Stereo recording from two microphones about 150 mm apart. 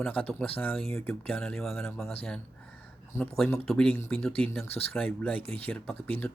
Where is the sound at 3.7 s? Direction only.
5° left (ahead or behind).